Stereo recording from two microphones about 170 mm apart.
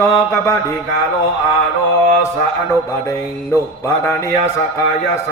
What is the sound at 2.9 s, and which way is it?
Music, 15° left (ahead or behind).